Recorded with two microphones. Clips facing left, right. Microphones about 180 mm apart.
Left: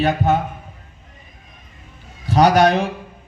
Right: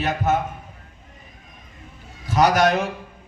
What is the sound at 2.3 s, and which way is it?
Speech, 30° left (ahead or behind).